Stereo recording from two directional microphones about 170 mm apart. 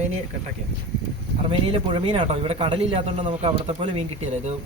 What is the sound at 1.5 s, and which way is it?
A man's voice, 35° right (ahead or behind).